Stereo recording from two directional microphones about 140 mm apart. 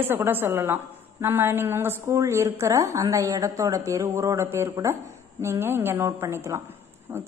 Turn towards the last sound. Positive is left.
turn(degrees=-20)  # may be behind; listen again after turning